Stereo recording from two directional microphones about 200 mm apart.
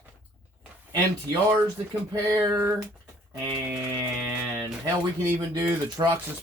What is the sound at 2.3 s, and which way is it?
Speech, 15° right (ahead or behind).